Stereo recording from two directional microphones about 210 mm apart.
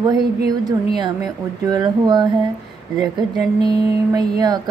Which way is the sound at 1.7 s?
20° right (ahead or behind).